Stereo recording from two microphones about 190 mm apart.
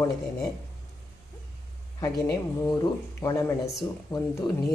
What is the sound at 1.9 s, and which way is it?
Speech, 20° left (ahead or behind).